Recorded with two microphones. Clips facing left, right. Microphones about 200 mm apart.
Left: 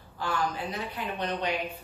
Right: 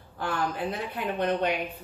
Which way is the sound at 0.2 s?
55° right (ahead or behind).